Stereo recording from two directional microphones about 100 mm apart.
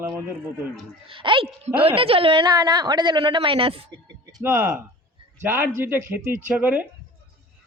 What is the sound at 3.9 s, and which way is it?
Speech, 45° right (ahead or behind).